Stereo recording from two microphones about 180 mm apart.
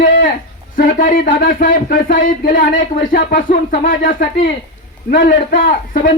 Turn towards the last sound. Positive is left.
turn(degrees=50)  # may be behind; listen again after turning